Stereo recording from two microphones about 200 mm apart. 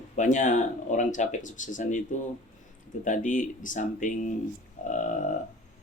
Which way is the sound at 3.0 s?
40° left (ahead or behind).